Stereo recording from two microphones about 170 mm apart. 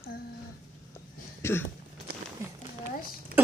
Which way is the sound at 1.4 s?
15° left (ahead or behind).